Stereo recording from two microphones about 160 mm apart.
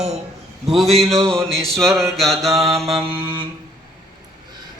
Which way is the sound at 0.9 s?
5° left (ahead or behind).